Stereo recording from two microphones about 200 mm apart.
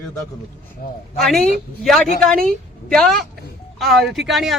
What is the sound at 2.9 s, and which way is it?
Speech, 5° left (ahead or behind).